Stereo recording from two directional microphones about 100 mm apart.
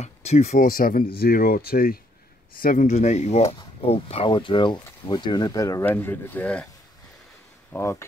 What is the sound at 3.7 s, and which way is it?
Speech, 75° left (ahead or behind).